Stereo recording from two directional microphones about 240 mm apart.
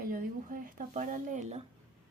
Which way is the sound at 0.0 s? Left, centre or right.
Right.